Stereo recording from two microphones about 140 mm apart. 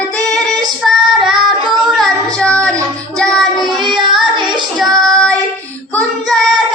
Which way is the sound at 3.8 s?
35° right (ahead or behind).